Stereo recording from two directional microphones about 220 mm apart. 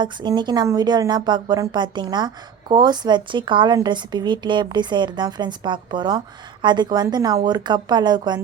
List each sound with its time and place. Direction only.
0.0 s speech: 20° right (ahead or behind)